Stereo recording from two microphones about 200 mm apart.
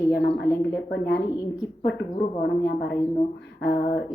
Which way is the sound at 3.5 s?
55° left (ahead or behind).